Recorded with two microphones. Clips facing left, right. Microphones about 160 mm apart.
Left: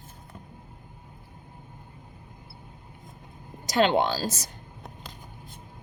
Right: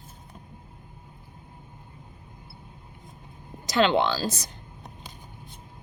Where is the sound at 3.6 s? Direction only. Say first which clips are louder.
Even; 45° left (ahead or behind).